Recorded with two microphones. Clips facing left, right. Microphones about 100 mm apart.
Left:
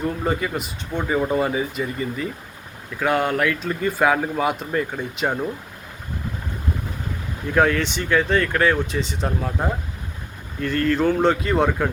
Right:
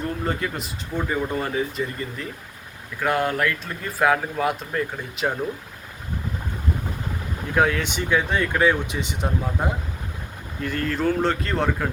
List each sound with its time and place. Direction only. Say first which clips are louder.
0.3 s speech: left 3 dB; 5° left (ahead or behind)
1.3 s speech: left 4 dB; 10° left (ahead or behind)
7.5 s speech: left 2 dB; 5° right (ahead or behind)
10.6 s speech: left 4 dB; 5° right (ahead or behind)